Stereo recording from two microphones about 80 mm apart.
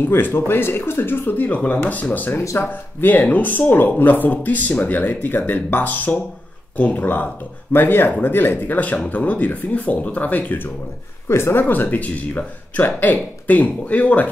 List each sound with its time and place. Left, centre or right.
0.0 s speech: left
11.2 s speech: left